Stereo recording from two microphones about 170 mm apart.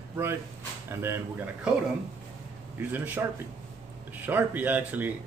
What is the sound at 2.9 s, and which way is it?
Speech, 10° right (ahead or behind).